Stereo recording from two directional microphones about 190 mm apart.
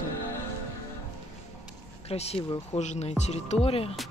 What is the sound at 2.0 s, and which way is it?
Speech, 30° left (ahead or behind).